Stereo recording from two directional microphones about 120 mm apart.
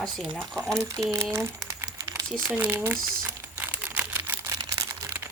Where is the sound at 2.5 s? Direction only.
15° right (ahead or behind).